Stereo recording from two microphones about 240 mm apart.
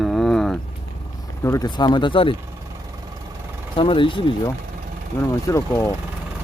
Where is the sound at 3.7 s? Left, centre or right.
Left.